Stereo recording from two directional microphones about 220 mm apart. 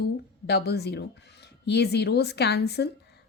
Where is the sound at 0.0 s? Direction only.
50° left (ahead or behind).